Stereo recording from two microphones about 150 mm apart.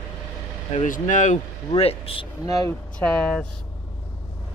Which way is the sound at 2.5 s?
25° left (ahead or behind).